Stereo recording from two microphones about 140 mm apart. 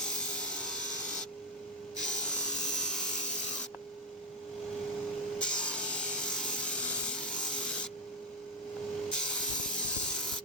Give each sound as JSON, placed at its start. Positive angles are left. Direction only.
{"t": 0.0, "sound": "wood", "side_deg": 5}
{"t": 2.0, "sound": "tools", "side_deg": 5}
{"t": 5.4, "sound": "tools", "side_deg": 5}
{"t": 9.0, "sound": "a sound", "side_deg": 5}